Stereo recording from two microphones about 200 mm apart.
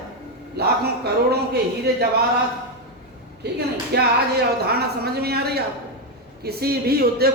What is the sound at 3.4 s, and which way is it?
A man's voice, 55° right (ahead or behind).